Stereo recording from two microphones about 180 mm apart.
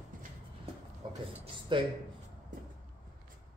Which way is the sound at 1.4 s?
30° right (ahead or behind).